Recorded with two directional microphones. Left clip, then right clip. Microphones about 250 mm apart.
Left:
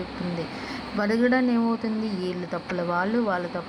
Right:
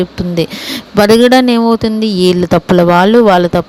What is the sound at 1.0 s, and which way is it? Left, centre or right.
Speech, right.